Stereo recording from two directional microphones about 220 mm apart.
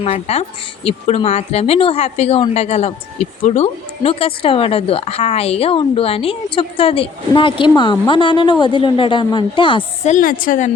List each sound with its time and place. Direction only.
0.0 s speech: 30° left (ahead or behind)